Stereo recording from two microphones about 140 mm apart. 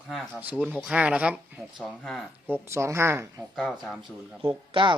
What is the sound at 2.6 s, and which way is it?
Speech, 20° right (ahead or behind).